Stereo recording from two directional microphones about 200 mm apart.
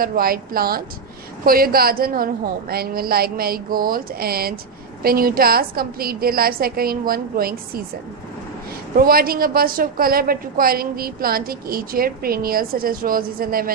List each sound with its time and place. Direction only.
0.0 s a woman's voice: 45° right (ahead or behind)
8.9 s a woman's voice: 45° right (ahead or behind)